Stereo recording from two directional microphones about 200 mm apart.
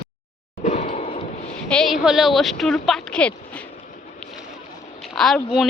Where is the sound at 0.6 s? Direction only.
35° left (ahead or behind).